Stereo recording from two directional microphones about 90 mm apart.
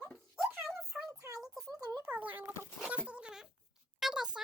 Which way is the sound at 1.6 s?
40° right (ahead or behind).